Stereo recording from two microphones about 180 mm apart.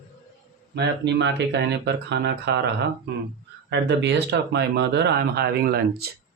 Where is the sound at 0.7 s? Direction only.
70° right (ahead or behind).